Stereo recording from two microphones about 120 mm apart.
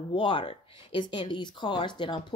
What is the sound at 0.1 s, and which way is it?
Speech, 45° left (ahead or behind).